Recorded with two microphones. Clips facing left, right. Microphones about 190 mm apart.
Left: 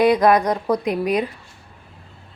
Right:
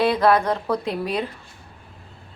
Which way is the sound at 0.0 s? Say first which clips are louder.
Left 3 dB; 15° left (ahead or behind).